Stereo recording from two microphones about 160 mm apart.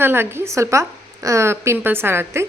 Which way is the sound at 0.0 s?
15° right (ahead or behind).